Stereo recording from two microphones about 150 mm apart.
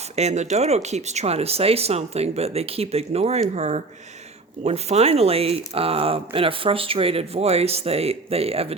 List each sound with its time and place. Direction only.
0.2 s speech: 50° right (ahead or behind)